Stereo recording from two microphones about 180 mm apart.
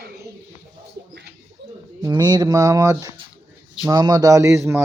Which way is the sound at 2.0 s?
20° right (ahead or behind).